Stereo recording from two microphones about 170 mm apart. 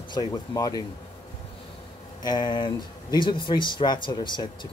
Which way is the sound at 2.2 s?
25° left (ahead or behind).